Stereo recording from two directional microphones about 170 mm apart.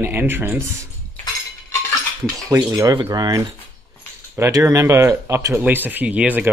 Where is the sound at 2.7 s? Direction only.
25° right (ahead or behind).